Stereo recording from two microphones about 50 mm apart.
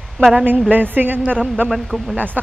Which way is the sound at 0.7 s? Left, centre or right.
Right.